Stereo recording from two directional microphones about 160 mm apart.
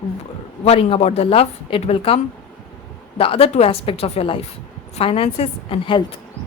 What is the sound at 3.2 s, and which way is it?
A woman's voice, 35° left (ahead or behind).